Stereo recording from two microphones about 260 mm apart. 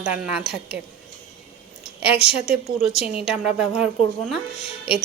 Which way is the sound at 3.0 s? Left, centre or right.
Left.